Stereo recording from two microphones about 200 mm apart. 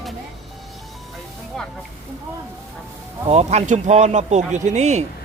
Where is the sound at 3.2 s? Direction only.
30° right (ahead or behind).